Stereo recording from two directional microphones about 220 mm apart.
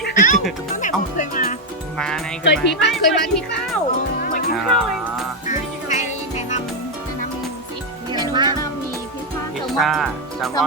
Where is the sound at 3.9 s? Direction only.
40° left (ahead or behind).